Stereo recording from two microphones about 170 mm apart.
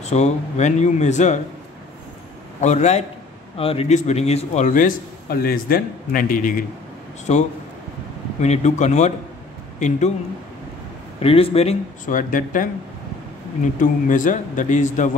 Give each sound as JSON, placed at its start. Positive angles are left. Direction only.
{"t": 0.1, "sound": "a man's voice", "side_deg": 40}
{"t": 2.6, "sound": "a man's voice", "side_deg": 40}
{"t": 7.3, "sound": "a man's voice", "side_deg": 40}
{"t": 11.1, "sound": "a man's voice", "side_deg": 35}
{"t": 12.1, "sound": "a man's voice", "side_deg": 50}
{"t": 13.7, "sound": "a man's voice", "side_deg": 50}